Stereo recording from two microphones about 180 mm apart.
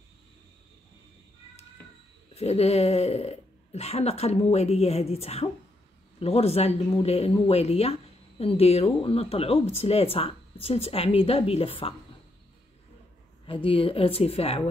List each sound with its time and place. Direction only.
2.3 s speech: 35° left (ahead or behind)
13.5 s speech: 30° left (ahead or behind)